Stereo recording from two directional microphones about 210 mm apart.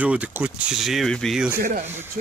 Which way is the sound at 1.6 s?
40° right (ahead or behind).